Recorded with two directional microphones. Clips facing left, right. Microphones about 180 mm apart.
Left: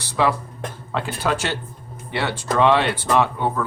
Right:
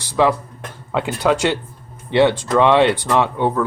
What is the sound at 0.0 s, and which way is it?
Speech, 15° right (ahead or behind).